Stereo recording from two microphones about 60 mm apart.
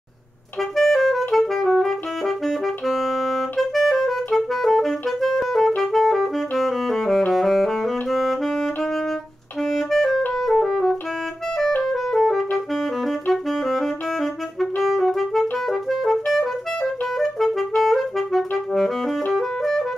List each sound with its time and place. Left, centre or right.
0.6 s music: centre
5.8 s saxophone: centre
9.6 s clarinet: centre
10.5 s music: centre
12.5 s saxophone: centre
15.5 s music: centre
18.7 s saxophone: centre
19.3 s music: centre